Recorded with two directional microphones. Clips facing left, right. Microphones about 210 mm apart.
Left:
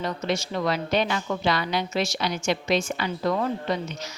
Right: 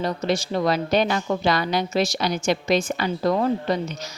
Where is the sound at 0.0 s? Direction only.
35° right (ahead or behind).